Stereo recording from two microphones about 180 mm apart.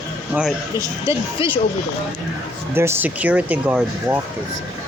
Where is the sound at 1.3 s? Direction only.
30° left (ahead or behind).